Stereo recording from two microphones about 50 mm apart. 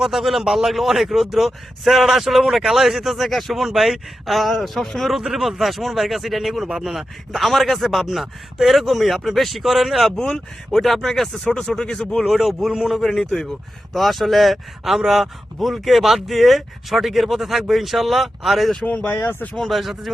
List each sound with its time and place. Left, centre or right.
0.0 s speech: centre
12.2 s speech: centre
19.1 s speech: left
19.5 s speech: centre